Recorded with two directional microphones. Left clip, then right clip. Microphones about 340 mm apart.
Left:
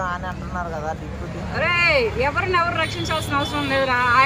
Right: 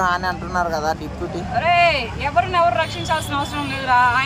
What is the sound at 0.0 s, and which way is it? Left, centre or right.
Vehicle, right.